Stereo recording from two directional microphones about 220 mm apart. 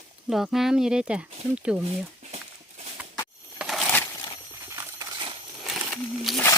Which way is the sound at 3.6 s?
Centre (ahead or behind).